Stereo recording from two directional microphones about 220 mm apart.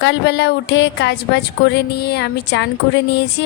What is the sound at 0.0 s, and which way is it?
A woman's voice, 50° left (ahead or behind).